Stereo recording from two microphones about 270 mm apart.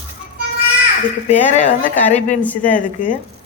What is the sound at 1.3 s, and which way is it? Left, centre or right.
Speech, left.